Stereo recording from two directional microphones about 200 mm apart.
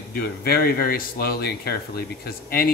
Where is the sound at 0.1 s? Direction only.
50° left (ahead or behind).